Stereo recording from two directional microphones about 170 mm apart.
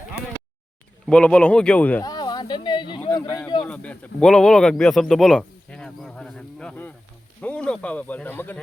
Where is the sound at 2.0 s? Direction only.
25° left (ahead or behind).